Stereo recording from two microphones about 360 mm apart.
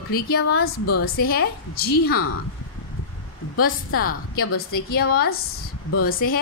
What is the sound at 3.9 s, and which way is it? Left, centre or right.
Speech, left.